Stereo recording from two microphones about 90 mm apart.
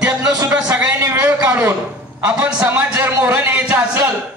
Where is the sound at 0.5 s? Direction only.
15° right (ahead or behind).